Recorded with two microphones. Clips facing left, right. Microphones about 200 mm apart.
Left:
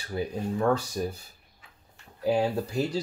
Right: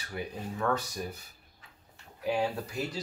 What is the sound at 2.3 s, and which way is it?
Speech, 30° left (ahead or behind).